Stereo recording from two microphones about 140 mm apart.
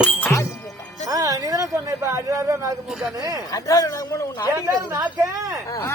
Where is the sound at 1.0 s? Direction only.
25° right (ahead or behind).